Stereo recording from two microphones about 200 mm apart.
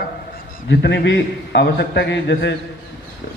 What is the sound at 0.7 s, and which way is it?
A man's voice, 60° left (ahead or behind).